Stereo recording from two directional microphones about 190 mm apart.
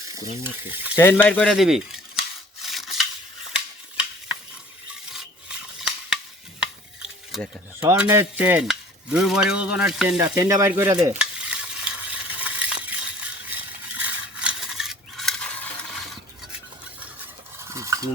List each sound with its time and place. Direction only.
0.1 s stir: 10° right (ahead or behind)
0.9 s rub: 10° left (ahead or behind)
5.1 s stir: 5° right (ahead or behind)
7.3 s a sound: centre (ahead or behind)
7.8 s stir: 10° right (ahead or behind)
12.4 s coin: 5° right (ahead or behind)
17.7 s stir: 15° right (ahead or behind)